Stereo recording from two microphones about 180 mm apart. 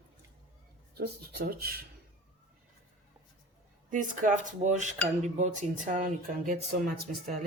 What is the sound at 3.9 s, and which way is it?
Speech, 45° right (ahead or behind).